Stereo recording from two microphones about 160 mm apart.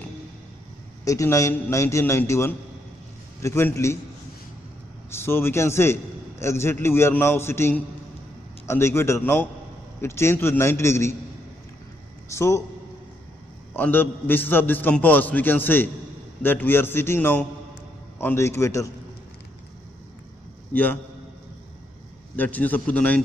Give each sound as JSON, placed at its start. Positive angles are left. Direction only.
{"t": 1.0, "sound": "a man's voice", "side_deg": 20}
{"t": 5.1, "sound": "a man's voice", "side_deg": 15}
{"t": 12.3, "sound": "a man's voice", "side_deg": 20}
{"t": 13.7, "sound": "a man's voice", "side_deg": 10}
{"t": 20.7, "sound": "a man's voice", "side_deg": 10}
{"t": 22.3, "sound": "a man's voice", "side_deg": 10}